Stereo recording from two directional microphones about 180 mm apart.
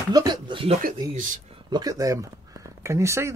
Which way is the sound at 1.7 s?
20° right (ahead or behind).